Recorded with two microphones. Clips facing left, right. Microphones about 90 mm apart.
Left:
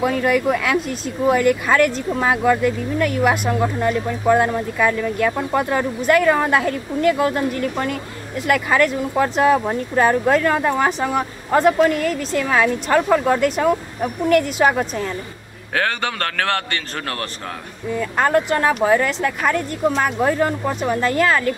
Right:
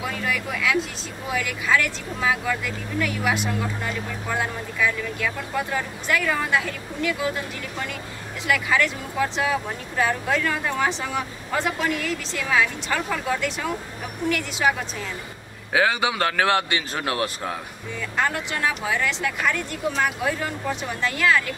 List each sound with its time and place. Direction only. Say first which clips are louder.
0.0 s speech: left 10 dB; 50° left (ahead or behind)
15.7 s a man's voice: right 1 dB; 10° right (ahead or behind)
17.9 s speech: left 8 dB; 45° left (ahead or behind)